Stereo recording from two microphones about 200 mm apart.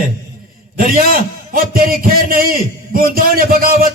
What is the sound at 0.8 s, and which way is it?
A man's voice, 45° right (ahead or behind).